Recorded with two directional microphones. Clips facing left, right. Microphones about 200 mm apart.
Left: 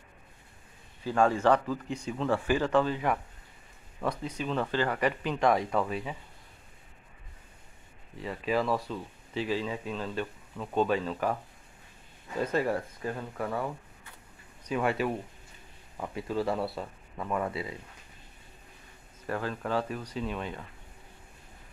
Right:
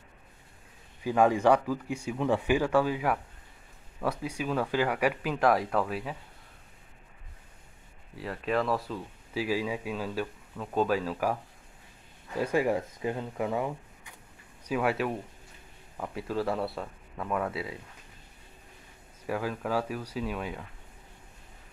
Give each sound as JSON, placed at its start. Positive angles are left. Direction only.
{"t": 1.0, "sound": "speech", "side_deg": -15}
{"t": 8.2, "sound": "speech", "side_deg": 0}
{"t": 12.4, "sound": "speech", "side_deg": -10}
{"t": 14.6, "sound": "speech", "side_deg": -5}
{"t": 19.2, "sound": "speech", "side_deg": -10}